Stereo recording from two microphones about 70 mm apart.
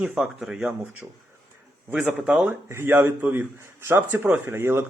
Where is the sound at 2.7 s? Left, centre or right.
Right.